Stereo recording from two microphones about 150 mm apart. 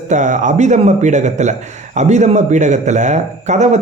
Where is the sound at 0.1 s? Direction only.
55° right (ahead or behind).